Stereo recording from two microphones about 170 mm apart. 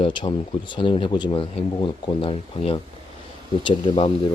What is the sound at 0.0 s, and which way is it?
Speech, 30° left (ahead or behind).